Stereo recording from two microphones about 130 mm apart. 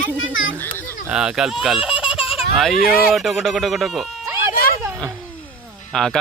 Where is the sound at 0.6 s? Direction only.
15° left (ahead or behind).